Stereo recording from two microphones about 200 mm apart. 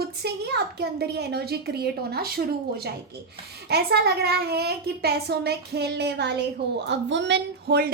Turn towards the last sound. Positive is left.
turn(degrees=-50)  # may be behind; listen again after turning